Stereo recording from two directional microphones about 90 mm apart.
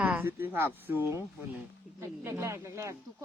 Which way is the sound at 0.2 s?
25° right (ahead or behind).